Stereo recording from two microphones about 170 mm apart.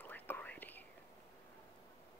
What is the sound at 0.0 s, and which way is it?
Whispering, 10° left (ahead or behind).